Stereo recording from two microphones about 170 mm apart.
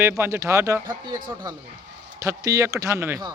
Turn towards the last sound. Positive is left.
turn(degrees=-15)  # may be behind; listen again after turning